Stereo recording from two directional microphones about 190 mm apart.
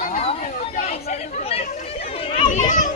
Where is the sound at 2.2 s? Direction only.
30° left (ahead or behind).